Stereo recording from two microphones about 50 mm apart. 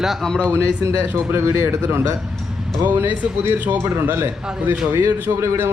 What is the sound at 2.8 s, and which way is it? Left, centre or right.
A man's voice, right.